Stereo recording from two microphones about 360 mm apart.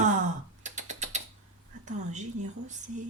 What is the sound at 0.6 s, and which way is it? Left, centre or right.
Typing, centre.